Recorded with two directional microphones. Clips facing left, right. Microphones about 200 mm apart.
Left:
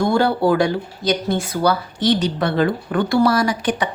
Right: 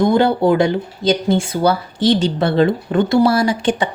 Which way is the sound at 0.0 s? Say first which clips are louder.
Right 3 dB; 20° right (ahead or behind).